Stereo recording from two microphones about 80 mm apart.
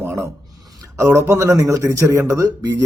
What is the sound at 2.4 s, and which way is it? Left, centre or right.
Speech, right.